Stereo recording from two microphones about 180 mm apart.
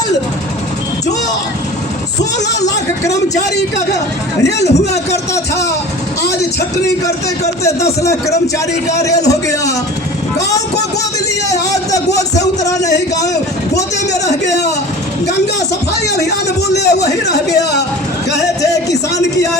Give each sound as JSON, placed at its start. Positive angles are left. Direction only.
{"t": 2.6, "sound": "a sound", "side_deg": 20}
{"t": 4.4, "sound": "speech", "side_deg": 65}
{"t": 4.7, "sound": "a man's voice", "side_deg": 40}
{"t": 5.3, "sound": "a man's voice", "side_deg": 15}
{"t": 7.6, "sound": "a man's voice", "side_deg": 15}
{"t": 9.2, "sound": "speech", "side_deg": 20}
{"t": 11.4, "sound": "speech", "side_deg": 20}
{"t": 14.4, "sound": "speech", "side_deg": 70}
{"t": 16.7, "sound": "speech", "side_deg": 65}
{"t": 18.3, "sound": "speech", "side_deg": 20}